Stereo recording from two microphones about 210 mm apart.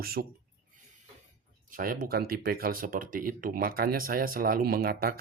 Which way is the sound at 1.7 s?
40° right (ahead or behind).